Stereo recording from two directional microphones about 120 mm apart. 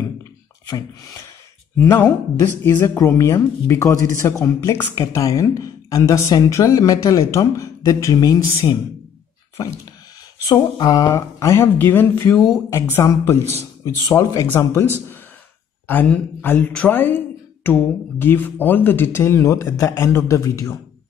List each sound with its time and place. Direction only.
0.7 s speech: 30° left (ahead or behind)
1.8 s speech: 20° left (ahead or behind)
10.5 s speech: 35° left (ahead or behind)
15.9 s speech: 15° left (ahead or behind)